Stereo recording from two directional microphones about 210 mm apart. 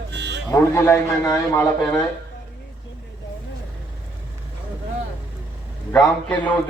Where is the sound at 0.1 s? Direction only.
55° right (ahead or behind).